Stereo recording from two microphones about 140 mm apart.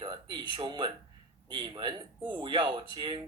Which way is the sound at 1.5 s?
35° right (ahead or behind).